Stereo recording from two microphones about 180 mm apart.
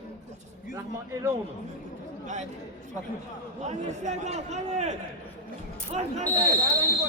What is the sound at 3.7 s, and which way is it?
A man's voice, 40° right (ahead or behind).